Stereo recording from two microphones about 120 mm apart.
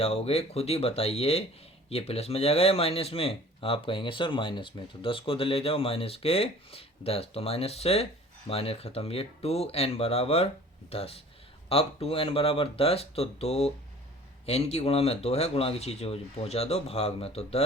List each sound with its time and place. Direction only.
0.0 s speech: 60° left (ahead or behind)